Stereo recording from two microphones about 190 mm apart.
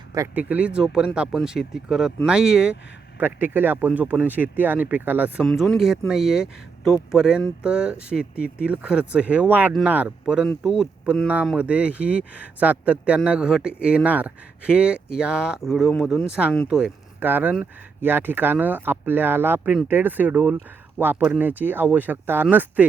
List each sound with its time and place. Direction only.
0.1 s speech: 15° right (ahead or behind)